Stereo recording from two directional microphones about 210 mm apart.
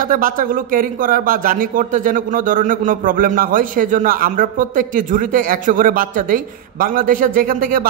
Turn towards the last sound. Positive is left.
turn(degrees=-40)  # may be behind; listen again after turning